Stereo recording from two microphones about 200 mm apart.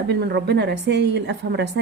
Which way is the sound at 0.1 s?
60° right (ahead or behind).